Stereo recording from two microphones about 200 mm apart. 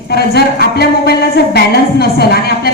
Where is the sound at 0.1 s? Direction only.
55° left (ahead or behind).